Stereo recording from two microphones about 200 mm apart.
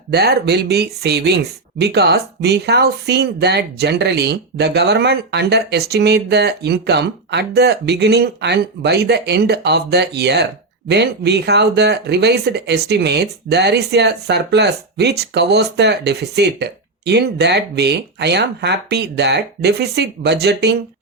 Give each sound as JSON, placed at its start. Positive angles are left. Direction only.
{"t": 0.1, "sound": "speech", "side_deg": -55}